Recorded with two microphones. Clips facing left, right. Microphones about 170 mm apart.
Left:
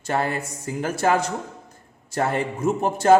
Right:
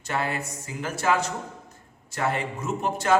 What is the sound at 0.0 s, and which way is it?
Speech, 45° left (ahead or behind).